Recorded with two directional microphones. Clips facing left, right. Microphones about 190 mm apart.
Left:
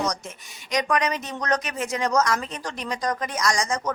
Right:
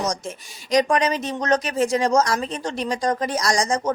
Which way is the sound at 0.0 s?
30° right (ahead or behind).